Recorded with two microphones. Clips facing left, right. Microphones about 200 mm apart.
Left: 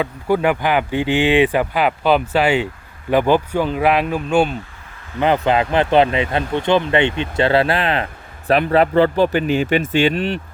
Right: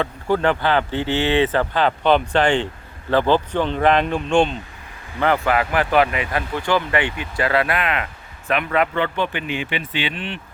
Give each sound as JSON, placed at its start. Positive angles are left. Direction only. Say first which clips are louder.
{"t": 0.0, "sound": "speech", "louder": "left 2 dB", "side_deg": 10}
{"t": 5.2, "sound": "speech", "louder": "left 3 dB", "side_deg": 20}